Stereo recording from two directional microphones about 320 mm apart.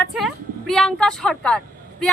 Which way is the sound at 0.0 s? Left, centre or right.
Centre.